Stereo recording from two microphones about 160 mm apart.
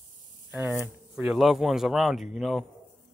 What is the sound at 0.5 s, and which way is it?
Speech, 10° right (ahead or behind).